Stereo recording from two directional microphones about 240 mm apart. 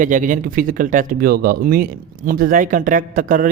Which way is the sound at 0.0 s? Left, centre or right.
Right.